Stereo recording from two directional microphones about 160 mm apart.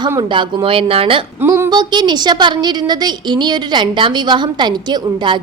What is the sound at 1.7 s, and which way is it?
A woman's voice, 25° right (ahead or behind).